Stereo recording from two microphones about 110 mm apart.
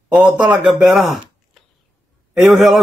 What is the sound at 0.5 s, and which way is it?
Speech, 5° right (ahead or behind).